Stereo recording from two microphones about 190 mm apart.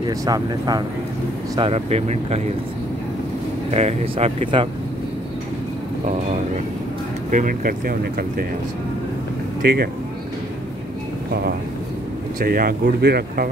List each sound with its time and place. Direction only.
0.0 s speech: 20° right (ahead or behind)
1.6 s speech: 35° right (ahead or behind)
3.7 s speech: 30° right (ahead or behind)
6.0 s speech: 40° right (ahead or behind)
9.6 s speech: 55° right (ahead or behind)
12.4 s speech: 50° right (ahead or behind)